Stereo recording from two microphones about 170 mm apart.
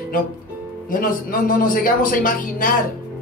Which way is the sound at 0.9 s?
55° left (ahead or behind).